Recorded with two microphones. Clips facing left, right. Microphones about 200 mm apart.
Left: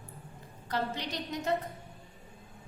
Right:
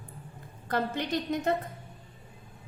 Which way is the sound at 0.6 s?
55° right (ahead or behind).